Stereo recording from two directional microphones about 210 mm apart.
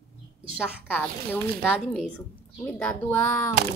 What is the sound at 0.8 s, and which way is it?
A woman's voice, 10° left (ahead or behind).